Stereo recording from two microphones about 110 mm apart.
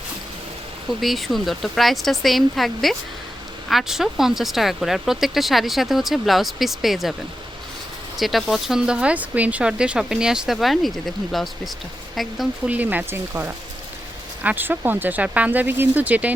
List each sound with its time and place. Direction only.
1.0 s speech: centre (ahead or behind)
8.1 s speech: centre (ahead or behind)
12.6 s speech: 15° right (ahead or behind)